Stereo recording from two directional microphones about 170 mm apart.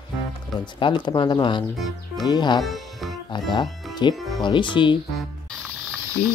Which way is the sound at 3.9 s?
25° left (ahead or behind).